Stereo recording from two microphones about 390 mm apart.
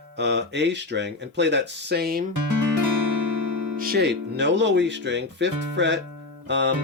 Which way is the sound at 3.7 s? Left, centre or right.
Right.